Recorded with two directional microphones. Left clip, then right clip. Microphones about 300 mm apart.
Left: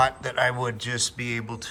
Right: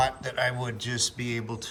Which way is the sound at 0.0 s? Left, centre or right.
Centre.